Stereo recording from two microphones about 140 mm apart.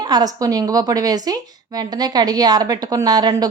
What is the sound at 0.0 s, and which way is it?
A woman's voice, 30° right (ahead or behind).